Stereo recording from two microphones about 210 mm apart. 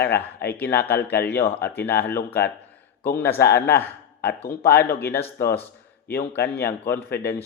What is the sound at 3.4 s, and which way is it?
Speech, 50° left (ahead or behind).